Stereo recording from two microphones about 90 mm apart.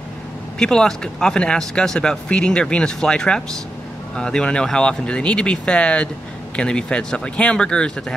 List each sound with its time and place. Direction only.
0.6 s speech: 10° left (ahead or behind)